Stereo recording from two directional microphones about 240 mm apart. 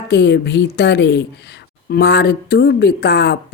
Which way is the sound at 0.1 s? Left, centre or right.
Left.